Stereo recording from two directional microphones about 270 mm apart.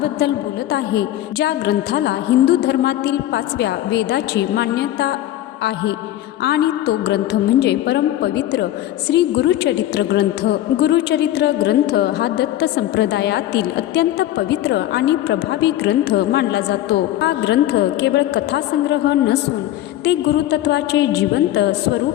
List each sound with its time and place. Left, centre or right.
0.7 s a woman's voice: left
6.4 s a woman's voice: left